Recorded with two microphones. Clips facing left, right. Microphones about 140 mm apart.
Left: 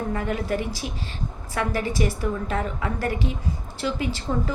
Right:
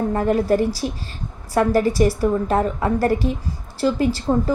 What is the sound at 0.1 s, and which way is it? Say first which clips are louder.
A woman's voice: right 10 dB; 40° right (ahead or behind).